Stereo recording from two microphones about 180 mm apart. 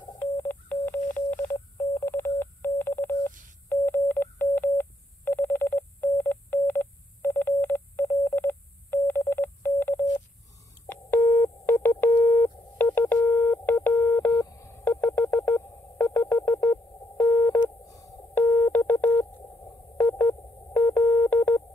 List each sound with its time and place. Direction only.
0.2 s telephone dialing: 10° left (ahead or behind)
10.9 s sidetone: 10° left (ahead or behind)
17.8 s telephone dialing: 20° left (ahead or behind)